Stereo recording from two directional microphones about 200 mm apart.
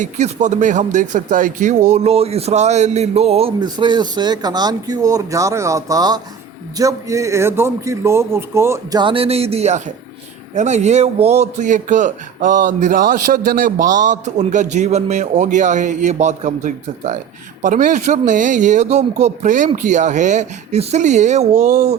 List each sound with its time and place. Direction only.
0.0 s a man's voice: 35° right (ahead or behind)